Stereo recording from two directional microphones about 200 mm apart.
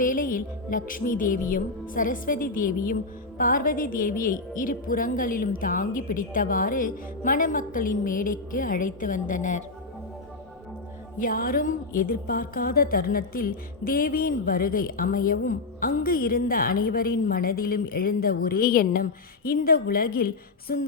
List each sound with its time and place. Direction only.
0.0 s a woman's voice: 45° left (ahead or behind)
11.2 s a woman's voice: 45° left (ahead or behind)